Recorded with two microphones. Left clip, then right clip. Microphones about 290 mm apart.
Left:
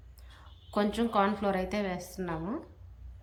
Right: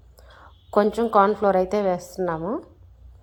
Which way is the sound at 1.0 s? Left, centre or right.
Right.